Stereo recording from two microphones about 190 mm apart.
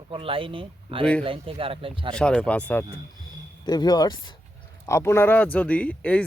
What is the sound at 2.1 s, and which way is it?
Speech, 5° left (ahead or behind).